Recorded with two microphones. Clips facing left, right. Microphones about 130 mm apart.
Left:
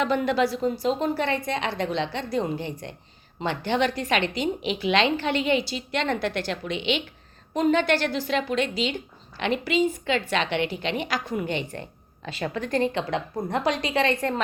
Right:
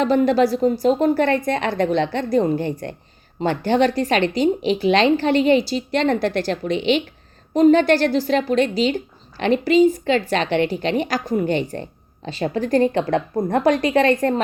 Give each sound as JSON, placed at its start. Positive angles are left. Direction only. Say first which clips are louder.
{"t": 0.0, "sound": "a woman's voice", "louder": "right 7 dB", "side_deg": -35}